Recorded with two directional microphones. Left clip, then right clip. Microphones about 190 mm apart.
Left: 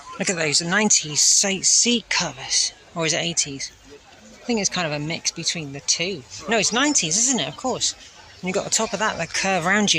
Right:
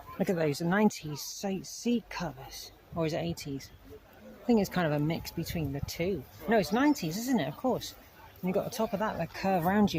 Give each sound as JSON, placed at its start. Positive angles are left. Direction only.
{"t": 0.2, "sound": "speech", "side_deg": -20}
{"t": 4.4, "sound": "speech", "side_deg": -25}
{"t": 8.4, "sound": "speech", "side_deg": 0}